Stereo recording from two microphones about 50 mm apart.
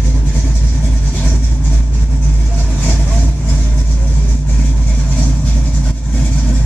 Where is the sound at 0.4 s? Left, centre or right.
Centre.